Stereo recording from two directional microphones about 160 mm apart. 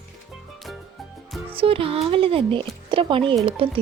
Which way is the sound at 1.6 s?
35° right (ahead or behind).